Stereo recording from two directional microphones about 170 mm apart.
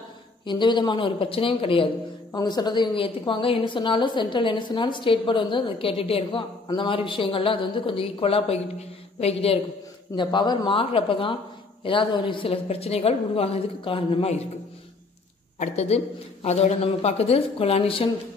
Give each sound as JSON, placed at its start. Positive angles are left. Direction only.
{"t": 0.5, "sound": "a woman's voice", "side_deg": 25}
{"t": 15.6, "sound": "a woman's voice", "side_deg": 40}